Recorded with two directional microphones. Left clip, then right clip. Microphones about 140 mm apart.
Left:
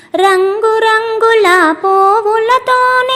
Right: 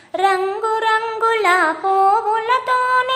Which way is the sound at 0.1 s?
35° left (ahead or behind).